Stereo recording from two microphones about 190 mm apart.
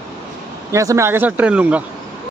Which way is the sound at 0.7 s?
15° right (ahead or behind).